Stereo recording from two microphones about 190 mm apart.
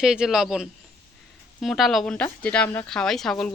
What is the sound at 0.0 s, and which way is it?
A woman's voice, 5° right (ahead or behind).